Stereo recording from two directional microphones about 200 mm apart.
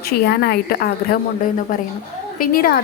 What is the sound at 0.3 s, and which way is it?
Speech, 55° left (ahead or behind).